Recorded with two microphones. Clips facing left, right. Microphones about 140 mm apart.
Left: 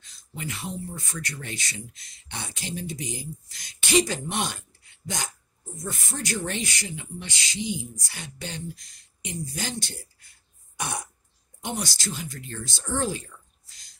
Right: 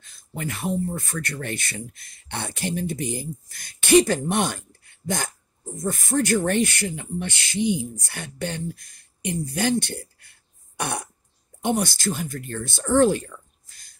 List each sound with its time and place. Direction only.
0.0 s speech: 55° right (ahead or behind)